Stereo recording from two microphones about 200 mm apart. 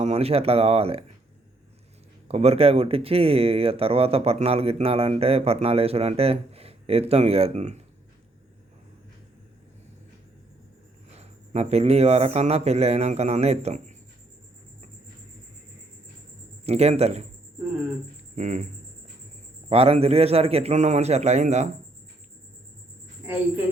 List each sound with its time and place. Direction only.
0.0 s speech: 30° right (ahead or behind)
2.2 s speech: 30° right (ahead or behind)
11.2 s speech: 30° right (ahead or behind)
16.6 s speech: 30° right (ahead or behind)
18.3 s speech: 35° right (ahead or behind)
19.7 s speech: 30° right (ahead or behind)